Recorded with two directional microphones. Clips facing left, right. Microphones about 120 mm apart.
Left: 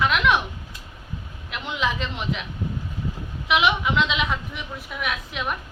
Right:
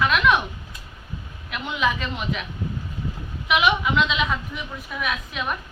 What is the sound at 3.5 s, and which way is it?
Speech, 20° left (ahead or behind).